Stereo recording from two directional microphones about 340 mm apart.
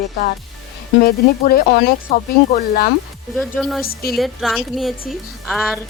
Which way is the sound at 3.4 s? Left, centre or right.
Centre.